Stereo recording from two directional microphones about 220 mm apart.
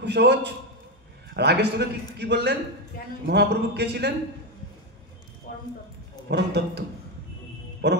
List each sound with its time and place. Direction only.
0.0 s a man's voice: 50° right (ahead or behind)
6.2 s a man's voice: 50° right (ahead or behind)
7.8 s a man's voice: 50° right (ahead or behind)